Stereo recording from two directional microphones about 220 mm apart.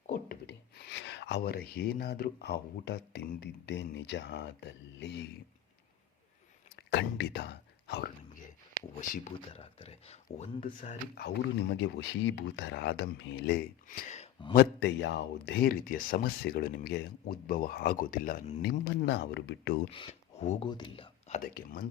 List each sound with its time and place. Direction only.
0.1 s speech: 45° left (ahead or behind)
6.7 s speech: 50° left (ahead or behind)
9.0 s speech: 35° left (ahead or behind)
11.8 s speech: 55° left (ahead or behind)
13.8 s speech: 35° left (ahead or behind)
14.5 s speech: 50° left (ahead or behind)
18.6 s speech: 50° left (ahead or behind)
19.9 s speech: 25° left (ahead or behind)
21.5 s speech: 45° left (ahead or behind)